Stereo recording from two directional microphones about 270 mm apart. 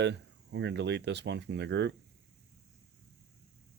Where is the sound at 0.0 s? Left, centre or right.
Right.